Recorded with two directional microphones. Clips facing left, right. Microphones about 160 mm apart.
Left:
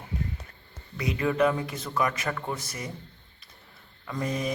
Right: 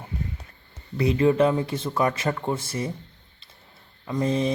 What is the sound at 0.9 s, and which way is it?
A man's voice, 30° right (ahead or behind).